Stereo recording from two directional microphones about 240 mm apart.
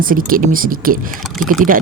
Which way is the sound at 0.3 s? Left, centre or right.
Right.